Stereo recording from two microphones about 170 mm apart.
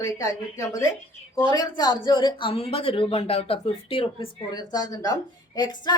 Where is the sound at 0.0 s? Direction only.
20° left (ahead or behind).